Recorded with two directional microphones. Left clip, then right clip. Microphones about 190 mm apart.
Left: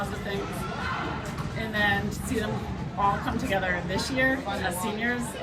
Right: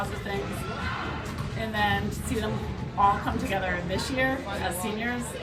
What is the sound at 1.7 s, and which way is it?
Speech, 15° right (ahead or behind).